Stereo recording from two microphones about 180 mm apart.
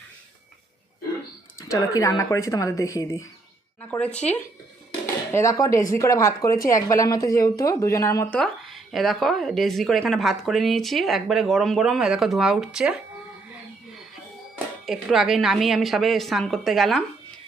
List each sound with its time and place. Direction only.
1.6 s a woman's voice: 20° left (ahead or behind)
8.4 s speech: centre (ahead or behind)
14.8 s speech: centre (ahead or behind)